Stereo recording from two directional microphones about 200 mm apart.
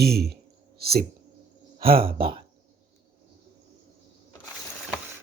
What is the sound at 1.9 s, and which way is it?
Speech, 30° right (ahead or behind).